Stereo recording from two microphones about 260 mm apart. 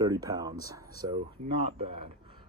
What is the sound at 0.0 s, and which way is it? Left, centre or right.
Speech, centre.